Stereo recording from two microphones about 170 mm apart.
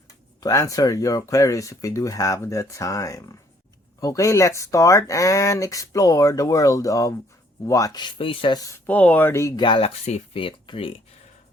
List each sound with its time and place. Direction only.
0.3 s speech: 20° left (ahead or behind)
8.9 s speech: 10° left (ahead or behind); by 11.0 s 30° left (ahead or behind)